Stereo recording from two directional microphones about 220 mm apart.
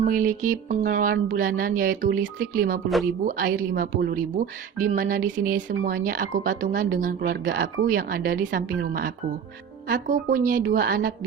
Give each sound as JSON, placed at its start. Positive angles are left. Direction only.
{"t": 0.0, "sound": "speech", "side_deg": -40}
{"t": 2.9, "sound": "speech", "side_deg": 0}
{"t": 3.2, "sound": "speech", "side_deg": -40}